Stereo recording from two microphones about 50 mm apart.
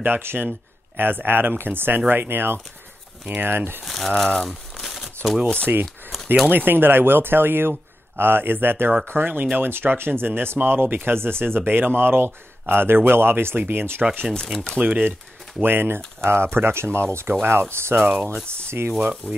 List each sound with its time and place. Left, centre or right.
0.0 s speech: right
3.8 s speech: centre
4.5 s crumpling: centre
5.7 s speech: right
14.3 s speech: centre
14.8 s speech: right
15.6 s speech: right
18.7 s stir: right
19.2 s speech: left